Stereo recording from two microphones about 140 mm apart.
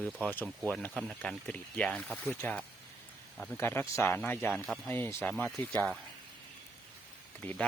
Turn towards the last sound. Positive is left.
turn(degrees=10)  # may be behind; listen again after turning